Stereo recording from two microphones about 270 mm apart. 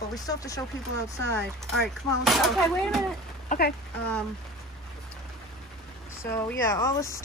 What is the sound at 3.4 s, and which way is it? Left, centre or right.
Speech, left.